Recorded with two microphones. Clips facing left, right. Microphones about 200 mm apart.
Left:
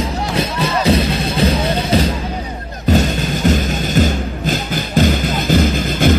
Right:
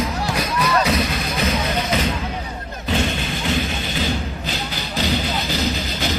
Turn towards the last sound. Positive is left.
turn(degrees=50)  # may be behind; listen again after turning